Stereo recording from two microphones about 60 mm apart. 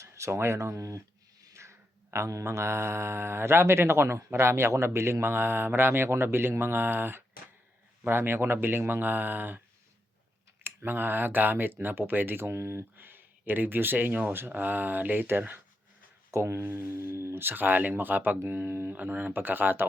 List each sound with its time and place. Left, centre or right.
0.0 s a sound: right
1.5 s mantra: right
8.0 s speech: right
10.6 s speech: right
13.0 s speech: right
16.3 s mantra: right
17.4 s speech: right